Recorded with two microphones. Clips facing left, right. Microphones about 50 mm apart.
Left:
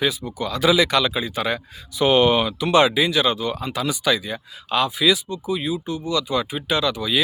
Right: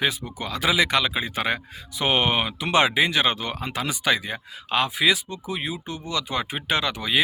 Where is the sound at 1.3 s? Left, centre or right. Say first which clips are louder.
Left 1 dB; right.